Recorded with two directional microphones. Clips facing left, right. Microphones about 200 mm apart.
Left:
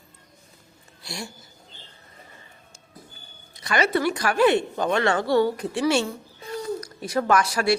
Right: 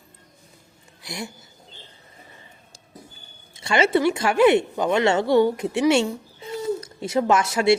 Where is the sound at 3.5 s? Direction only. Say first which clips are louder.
Right 3 dB; 25° right (ahead or behind).